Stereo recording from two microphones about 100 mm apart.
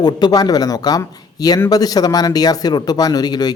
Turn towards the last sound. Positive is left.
turn(degrees=45)  # may be behind; listen again after turning